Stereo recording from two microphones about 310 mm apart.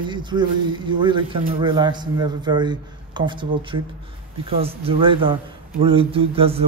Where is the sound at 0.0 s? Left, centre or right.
Centre.